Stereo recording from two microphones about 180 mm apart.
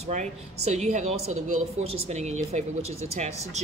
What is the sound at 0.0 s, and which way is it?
Speech, 40° right (ahead or behind).